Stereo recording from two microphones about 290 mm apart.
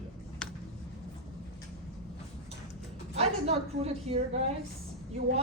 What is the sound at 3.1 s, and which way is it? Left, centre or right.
A woman's voice, right.